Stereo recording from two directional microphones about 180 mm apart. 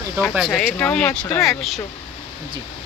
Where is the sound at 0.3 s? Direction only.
Centre (ahead or behind).